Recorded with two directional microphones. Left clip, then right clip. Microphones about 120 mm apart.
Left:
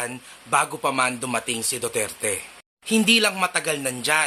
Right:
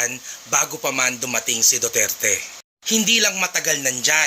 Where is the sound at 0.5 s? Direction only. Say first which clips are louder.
Even; 15° left (ahead or behind).